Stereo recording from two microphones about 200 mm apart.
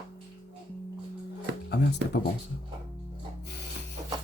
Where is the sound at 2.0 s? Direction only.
60° right (ahead or behind).